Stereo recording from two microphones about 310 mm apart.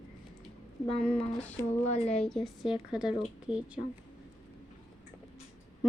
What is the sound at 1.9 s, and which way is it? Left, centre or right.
Speech, centre.